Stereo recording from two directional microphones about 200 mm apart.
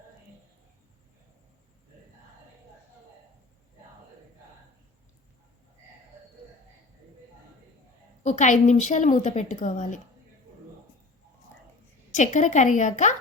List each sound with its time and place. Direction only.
8.2 s a woman's voice: 40° left (ahead or behind)
12.1 s a woman's voice: 40° left (ahead or behind)